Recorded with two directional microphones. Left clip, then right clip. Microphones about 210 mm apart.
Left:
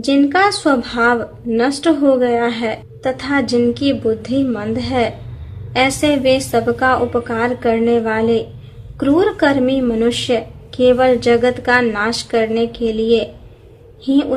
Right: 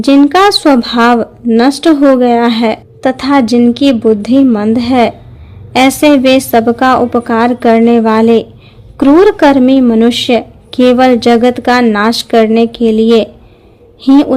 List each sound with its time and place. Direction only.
0.0 s speech: 45° right (ahead or behind)